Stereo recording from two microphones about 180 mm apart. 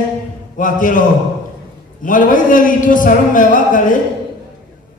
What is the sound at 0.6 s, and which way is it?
Speech, 45° left (ahead or behind).